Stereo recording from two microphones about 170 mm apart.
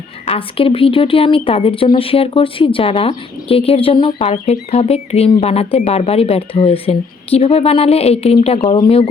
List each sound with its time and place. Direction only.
0.3 s speech: 30° left (ahead or behind)